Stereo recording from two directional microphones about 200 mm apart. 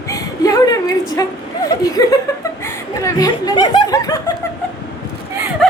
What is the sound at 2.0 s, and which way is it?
Chuckle, 15° left (ahead or behind).